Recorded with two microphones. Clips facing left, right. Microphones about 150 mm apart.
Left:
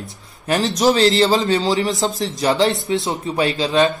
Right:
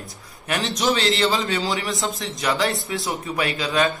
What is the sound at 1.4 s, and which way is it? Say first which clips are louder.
Speech: left 7 dB; 25° left (ahead or behind).